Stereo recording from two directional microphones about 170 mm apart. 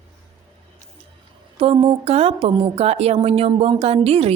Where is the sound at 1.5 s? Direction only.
35° right (ahead or behind).